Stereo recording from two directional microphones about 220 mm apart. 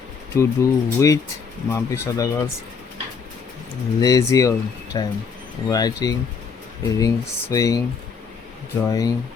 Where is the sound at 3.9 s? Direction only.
15° left (ahead or behind).